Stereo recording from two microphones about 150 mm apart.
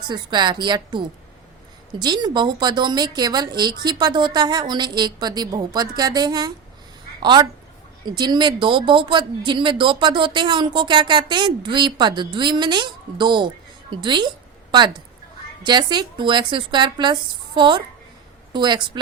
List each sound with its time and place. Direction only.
0.1 s a woman's voice: 30° right (ahead or behind)